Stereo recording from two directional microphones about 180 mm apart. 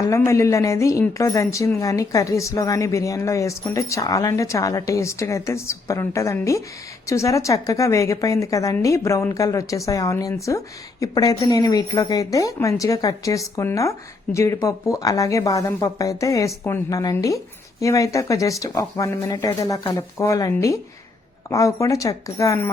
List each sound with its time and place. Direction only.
0.0 s a woman's voice: 15° left (ahead or behind)